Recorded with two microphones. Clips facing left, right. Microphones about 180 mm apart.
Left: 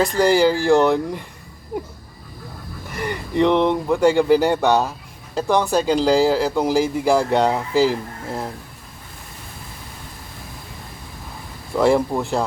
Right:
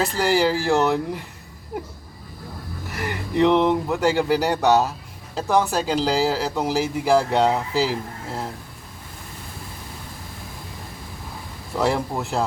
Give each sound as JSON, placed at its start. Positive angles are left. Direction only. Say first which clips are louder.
{"t": 0.0, "sound": "speech", "louder": "left 4 dB", "side_deg": -5}
{"t": 2.9, "sound": "speech", "louder": "left 2 dB", "side_deg": -5}
{"t": 11.9, "sound": "speech", "louder": "left 8 dB", "side_deg": 0}